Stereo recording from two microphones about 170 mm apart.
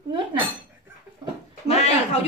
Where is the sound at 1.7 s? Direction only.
40° left (ahead or behind).